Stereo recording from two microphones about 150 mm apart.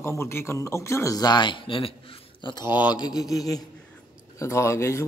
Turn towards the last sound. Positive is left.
turn(degrees=20)  # may be behind; listen again after turning